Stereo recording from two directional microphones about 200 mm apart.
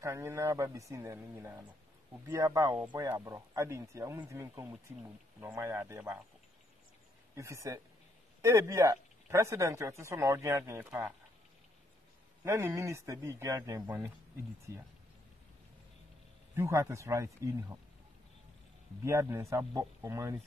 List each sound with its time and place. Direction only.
0.0 s speech: 15° right (ahead or behind)
7.3 s speech: 15° right (ahead or behind)
12.4 s speech: 15° right (ahead or behind)
16.5 s speech: 15° right (ahead or behind)
19.0 s speech: 15° right (ahead or behind)